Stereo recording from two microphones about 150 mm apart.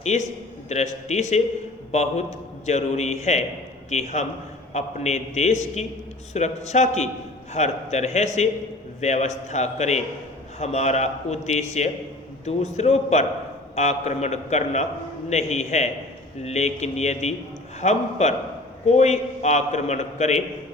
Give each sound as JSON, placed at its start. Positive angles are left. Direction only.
{"t": 0.0, "sound": "a man's voice", "side_deg": 50}